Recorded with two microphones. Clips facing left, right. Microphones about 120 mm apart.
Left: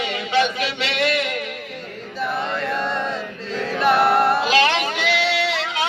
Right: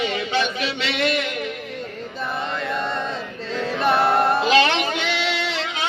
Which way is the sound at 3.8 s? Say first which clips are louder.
Left 2 dB; 25° right (ahead or behind).